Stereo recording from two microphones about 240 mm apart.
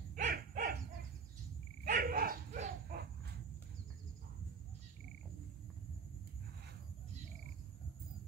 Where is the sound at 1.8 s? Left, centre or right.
Right.